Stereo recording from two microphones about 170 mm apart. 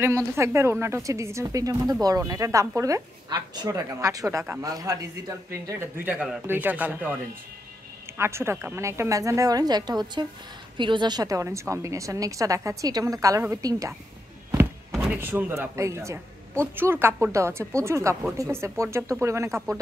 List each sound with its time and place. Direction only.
0.0 s a woman's voice: 15° right (ahead or behind)
8.2 s a woman's voice: 15° right (ahead or behind)
14.9 s a sound: centre (ahead or behind)
15.1 s speech: 10° right (ahead or behind)